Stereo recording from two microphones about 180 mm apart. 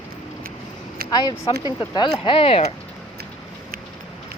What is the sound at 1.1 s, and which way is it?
Speech, 20° left (ahead or behind).